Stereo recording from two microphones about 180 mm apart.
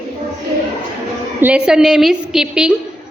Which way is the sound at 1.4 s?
5° right (ahead or behind).